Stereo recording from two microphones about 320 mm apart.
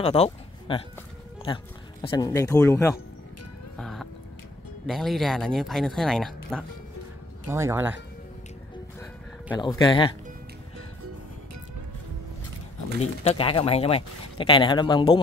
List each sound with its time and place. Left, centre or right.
0.0 s speech: centre
3.7 s music: centre
4.8 s speech: centre
9.5 s speech: centre
13.0 s speech: centre